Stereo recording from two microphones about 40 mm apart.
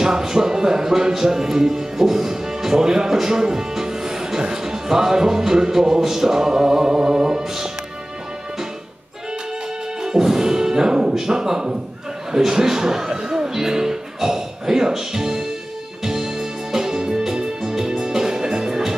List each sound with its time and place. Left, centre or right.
0.0 s speech: centre
4.4 s music: centre
10.0 s music: centre
13.5 s speech: centre
16.0 s music: centre